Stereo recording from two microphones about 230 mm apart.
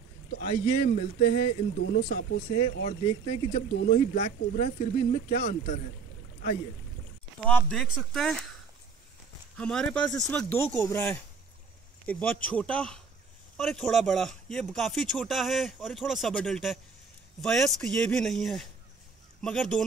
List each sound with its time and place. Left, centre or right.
0.3 s speech: left
7.4 s speech: centre
9.6 s speech: centre